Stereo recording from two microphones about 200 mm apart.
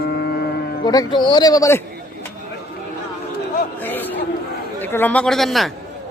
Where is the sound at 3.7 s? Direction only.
10° left (ahead or behind).